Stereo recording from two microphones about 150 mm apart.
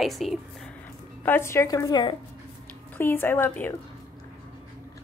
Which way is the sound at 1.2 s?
15° left (ahead or behind).